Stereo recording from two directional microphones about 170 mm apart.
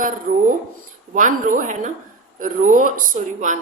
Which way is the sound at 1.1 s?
50° right (ahead or behind).